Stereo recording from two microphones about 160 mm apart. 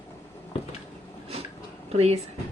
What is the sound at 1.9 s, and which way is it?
Speech, 40° right (ahead or behind).